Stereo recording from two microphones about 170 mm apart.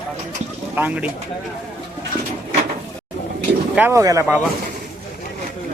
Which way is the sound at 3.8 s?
15° right (ahead or behind).